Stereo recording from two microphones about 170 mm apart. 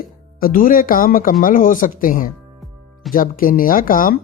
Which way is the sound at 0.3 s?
55° left (ahead or behind).